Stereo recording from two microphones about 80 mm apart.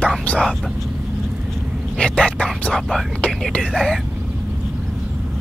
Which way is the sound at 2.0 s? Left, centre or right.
Centre.